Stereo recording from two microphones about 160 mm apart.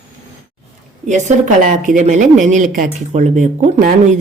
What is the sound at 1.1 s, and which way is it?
Speech, 50° right (ahead or behind).